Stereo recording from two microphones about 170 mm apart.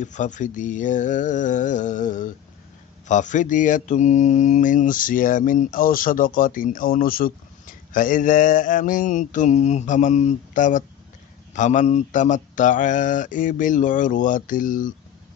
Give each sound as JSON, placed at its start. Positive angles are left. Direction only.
{"t": 0.0, "sound": "mantra", "side_deg": 45}